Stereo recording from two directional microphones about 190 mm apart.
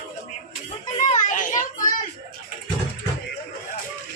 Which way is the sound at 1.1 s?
40° left (ahead or behind).